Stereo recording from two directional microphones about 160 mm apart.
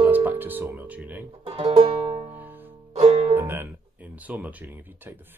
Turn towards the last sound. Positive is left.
turn(degrees=-10)  # may be behind; listen again after turning